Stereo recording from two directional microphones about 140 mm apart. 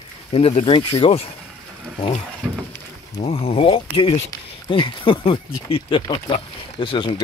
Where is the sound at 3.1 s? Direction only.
45° left (ahead or behind).